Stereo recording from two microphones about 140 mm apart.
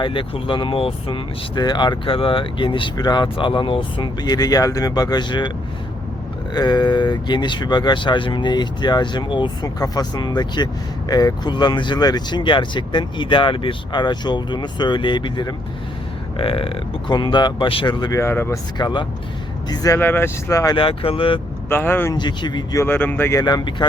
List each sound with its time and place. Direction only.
0.0 s speech: 40° left (ahead or behind)
6.5 s speech: 30° left (ahead or behind)
18.2 s speech: 20° left (ahead or behind)
18.8 s speech: 30° left (ahead or behind)
20.0 s speech: 15° left (ahead or behind)
20.7 s speech: 40° left (ahead or behind)
21.7 s speech: 15° left (ahead or behind)
22.1 s speech: 30° left (ahead or behind)
22.8 s speech: 15° left (ahead or behind)
23.4 s speech: 30° left (ahead or behind)